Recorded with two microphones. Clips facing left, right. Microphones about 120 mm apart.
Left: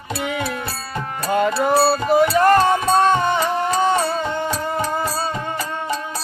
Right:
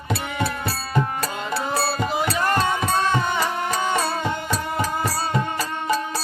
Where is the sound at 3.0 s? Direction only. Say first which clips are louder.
Left 5 dB; 50° left (ahead or behind).